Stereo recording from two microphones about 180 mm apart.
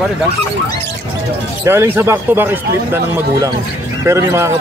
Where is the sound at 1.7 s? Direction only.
15° right (ahead or behind).